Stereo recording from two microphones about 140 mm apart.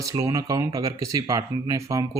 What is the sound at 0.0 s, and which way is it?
Speech, 25° right (ahead or behind).